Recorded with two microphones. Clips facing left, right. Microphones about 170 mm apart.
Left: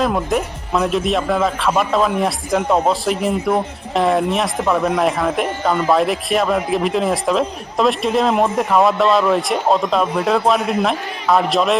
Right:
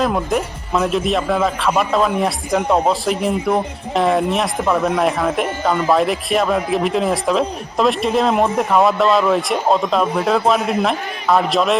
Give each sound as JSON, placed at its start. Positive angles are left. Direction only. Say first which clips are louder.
{"t": 0.0, "sound": "speech", "louder": "even", "side_deg": 0}